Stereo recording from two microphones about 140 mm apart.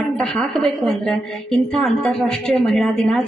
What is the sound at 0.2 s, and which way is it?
A woman's voice, 5° left (ahead or behind).